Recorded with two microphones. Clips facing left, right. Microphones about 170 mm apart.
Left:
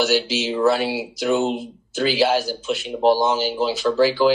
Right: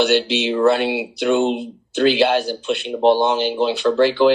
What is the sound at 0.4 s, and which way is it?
Speech, centre (ahead or behind).